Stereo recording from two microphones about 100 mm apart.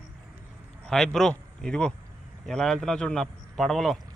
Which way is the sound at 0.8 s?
5° left (ahead or behind).